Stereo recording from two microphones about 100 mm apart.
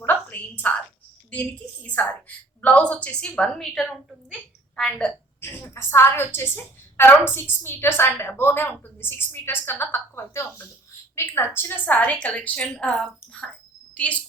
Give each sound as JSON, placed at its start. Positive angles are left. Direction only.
{"t": 0.0, "sound": "a sound", "side_deg": 20}
{"t": 1.3, "sound": "a woman's voice", "side_deg": 15}
{"t": 5.4, "sound": "a woman's voice", "side_deg": 25}